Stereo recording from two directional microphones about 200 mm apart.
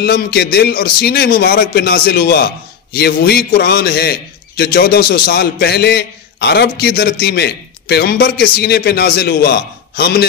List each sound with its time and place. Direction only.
0.0 s a man's voice: 50° left (ahead or behind)